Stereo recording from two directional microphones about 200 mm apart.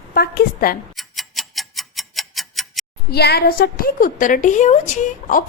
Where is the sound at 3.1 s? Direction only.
55° left (ahead or behind).